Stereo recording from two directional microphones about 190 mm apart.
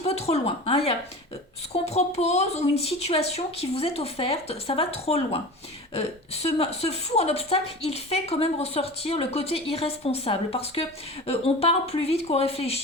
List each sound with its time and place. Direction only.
0.0 s speech: 35° left (ahead or behind)